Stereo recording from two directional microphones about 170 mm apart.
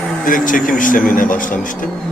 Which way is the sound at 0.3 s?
50° left (ahead or behind).